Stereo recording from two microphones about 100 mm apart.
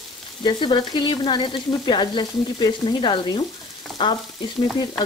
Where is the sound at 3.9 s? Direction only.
50° left (ahead or behind).